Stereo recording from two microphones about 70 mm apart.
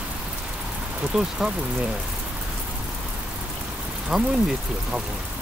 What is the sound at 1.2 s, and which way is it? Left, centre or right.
Speech, centre.